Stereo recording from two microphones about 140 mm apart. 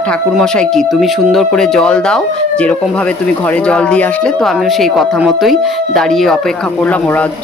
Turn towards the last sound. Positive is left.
turn(degrees=10)  # may be behind; listen again after turning